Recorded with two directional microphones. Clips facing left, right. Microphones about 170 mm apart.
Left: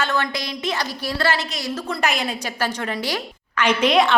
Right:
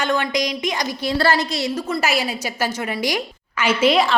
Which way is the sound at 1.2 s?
40° right (ahead or behind).